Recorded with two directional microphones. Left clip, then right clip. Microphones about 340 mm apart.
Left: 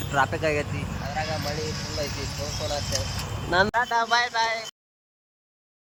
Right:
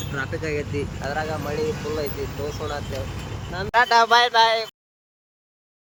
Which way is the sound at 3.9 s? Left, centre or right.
Right.